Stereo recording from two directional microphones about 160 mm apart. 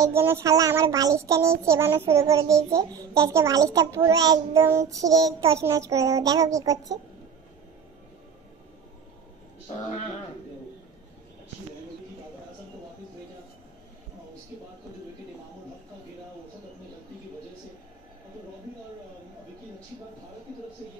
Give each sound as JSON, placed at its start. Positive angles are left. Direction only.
{"t": 0.0, "sound": "speech", "side_deg": -15}